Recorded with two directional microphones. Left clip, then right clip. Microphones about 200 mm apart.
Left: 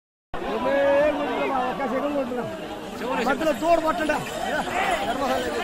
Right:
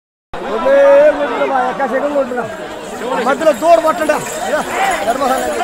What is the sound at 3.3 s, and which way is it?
Speech, 45° right (ahead or behind).